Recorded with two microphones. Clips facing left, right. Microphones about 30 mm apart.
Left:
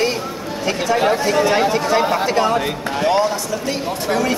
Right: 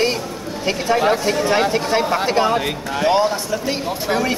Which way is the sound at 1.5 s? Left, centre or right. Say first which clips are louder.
Left 1 dB; centre.